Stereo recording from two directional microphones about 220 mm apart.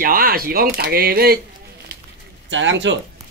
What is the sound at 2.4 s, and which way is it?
Speech, 55° right (ahead or behind).